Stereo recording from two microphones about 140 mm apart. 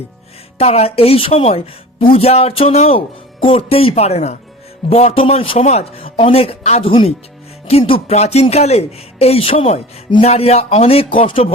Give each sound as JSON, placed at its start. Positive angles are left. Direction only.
{"t": 0.6, "sound": "speech", "side_deg": 45}